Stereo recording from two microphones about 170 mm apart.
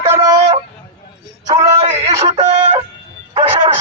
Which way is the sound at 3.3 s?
35° right (ahead or behind).